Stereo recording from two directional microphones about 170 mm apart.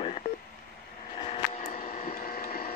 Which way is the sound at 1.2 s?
35° left (ahead or behind).